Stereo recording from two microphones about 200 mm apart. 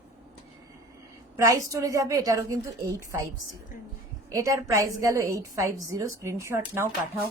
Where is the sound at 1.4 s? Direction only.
15° right (ahead or behind).